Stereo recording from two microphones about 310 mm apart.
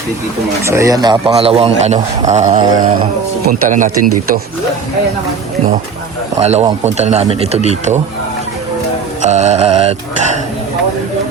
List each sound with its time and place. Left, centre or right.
0.6 s a man's voice: centre
3.4 s mantra: right
6.4 s mantra: right
9.2 s mantra: right